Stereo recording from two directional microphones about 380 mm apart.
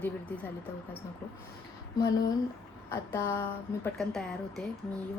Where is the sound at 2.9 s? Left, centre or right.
Centre.